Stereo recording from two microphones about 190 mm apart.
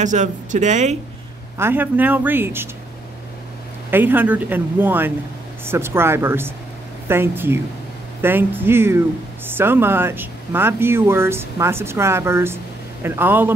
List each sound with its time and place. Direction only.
0.0 s speech: 40° right (ahead or behind)
1.6 s speech: 10° right (ahead or behind)
3.9 s speech: 10° right (ahead or behind)